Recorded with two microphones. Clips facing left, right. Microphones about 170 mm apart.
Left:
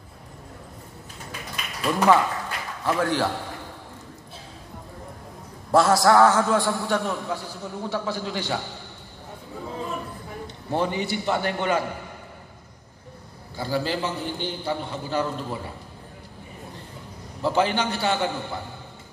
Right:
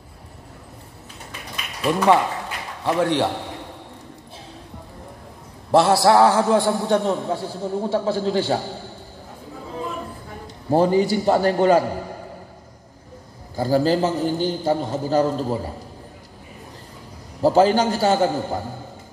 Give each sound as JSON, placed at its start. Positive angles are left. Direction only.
{"t": 1.9, "sound": "a man's voice", "side_deg": -25}
{"t": 5.7, "sound": "a man's voice", "side_deg": -25}
{"t": 10.4, "sound": "a man's voice", "side_deg": -35}
{"t": 13.6, "sound": "a man's voice", "side_deg": -40}
{"t": 17.4, "sound": "a man's voice", "side_deg": -40}